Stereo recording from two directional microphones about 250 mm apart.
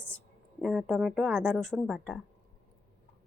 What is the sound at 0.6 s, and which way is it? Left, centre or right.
Speech, centre.